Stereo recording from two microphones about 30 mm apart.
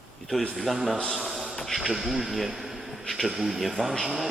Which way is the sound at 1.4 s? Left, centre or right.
Centre.